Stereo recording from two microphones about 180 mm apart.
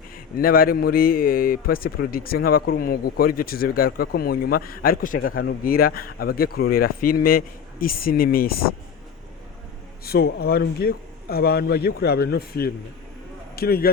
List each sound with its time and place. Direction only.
0.3 s a man's voice: 55° left (ahead or behind)
10.0 s a man's voice: 60° left (ahead or behind)